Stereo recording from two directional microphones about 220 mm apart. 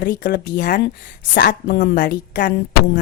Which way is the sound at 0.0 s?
45° left (ahead or behind).